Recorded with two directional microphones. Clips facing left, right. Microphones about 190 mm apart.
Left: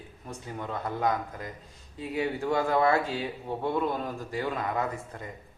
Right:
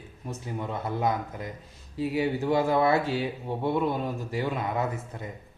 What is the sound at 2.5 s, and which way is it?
Speech, 25° right (ahead or behind).